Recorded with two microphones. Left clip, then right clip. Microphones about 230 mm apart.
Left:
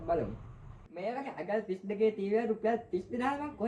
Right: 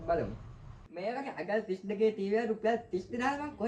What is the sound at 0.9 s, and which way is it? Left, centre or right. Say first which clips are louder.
Speech: right 1 dB; right.